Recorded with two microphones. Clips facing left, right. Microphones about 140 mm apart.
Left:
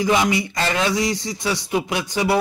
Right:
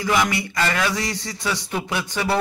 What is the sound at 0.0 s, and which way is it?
Speech, 20° left (ahead or behind).